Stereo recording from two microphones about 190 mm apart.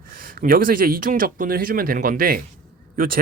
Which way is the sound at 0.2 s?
50° right (ahead or behind).